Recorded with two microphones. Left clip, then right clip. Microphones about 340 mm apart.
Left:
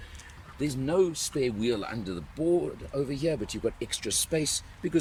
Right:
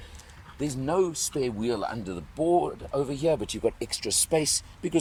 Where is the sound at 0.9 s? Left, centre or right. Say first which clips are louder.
Even; centre.